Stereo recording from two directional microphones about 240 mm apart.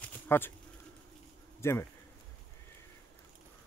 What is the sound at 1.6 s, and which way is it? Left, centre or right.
Speech, centre.